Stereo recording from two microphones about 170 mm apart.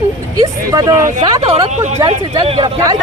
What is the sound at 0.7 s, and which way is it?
Speech, 20° right (ahead or behind).